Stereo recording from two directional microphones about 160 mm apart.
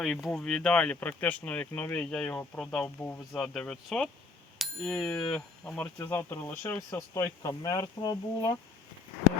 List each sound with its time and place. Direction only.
0.0 s speech: centre (ahead or behind)
4.5 s bicycle bell: centre (ahead or behind)
5.3 s speech: 10° left (ahead or behind); by 8.5 s 25° left (ahead or behind)